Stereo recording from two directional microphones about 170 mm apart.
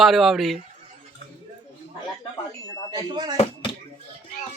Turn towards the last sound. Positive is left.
turn(degrees=-25)  # may be behind; listen again after turning